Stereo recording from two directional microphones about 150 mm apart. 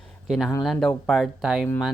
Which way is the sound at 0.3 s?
Centre (ahead or behind).